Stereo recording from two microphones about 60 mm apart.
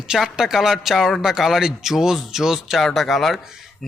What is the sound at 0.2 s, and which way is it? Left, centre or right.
A man's voice, centre.